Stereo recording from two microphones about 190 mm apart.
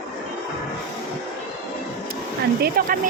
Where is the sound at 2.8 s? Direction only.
50° right (ahead or behind).